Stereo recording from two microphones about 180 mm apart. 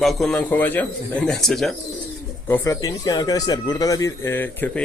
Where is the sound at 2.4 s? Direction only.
15° left (ahead or behind).